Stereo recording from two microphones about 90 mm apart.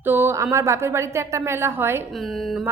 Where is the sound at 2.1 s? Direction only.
Centre (ahead or behind).